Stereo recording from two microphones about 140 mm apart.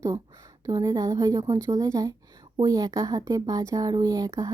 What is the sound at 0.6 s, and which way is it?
Speech, 25° right (ahead or behind).